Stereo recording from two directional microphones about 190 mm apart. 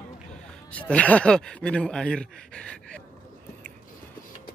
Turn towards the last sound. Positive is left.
turn(degrees=5)  # may be behind; listen again after turning